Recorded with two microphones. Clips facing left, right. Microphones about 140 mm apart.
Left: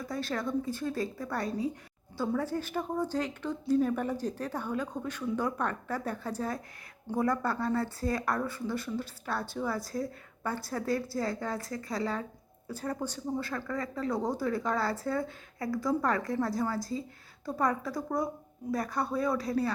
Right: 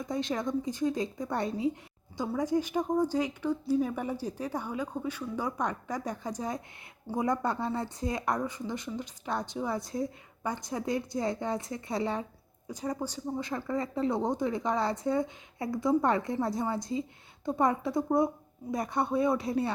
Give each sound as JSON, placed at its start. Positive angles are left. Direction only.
{"t": 0.0, "sound": "speech", "side_deg": -20}
{"t": 1.6, "sound": "a sound", "side_deg": -25}
{"t": 2.2, "sound": "speech", "side_deg": -15}
{"t": 12.6, "sound": "speech", "side_deg": -15}